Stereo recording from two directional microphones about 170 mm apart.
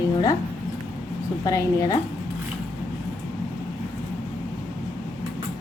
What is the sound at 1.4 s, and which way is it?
Speech, 20° left (ahead or behind).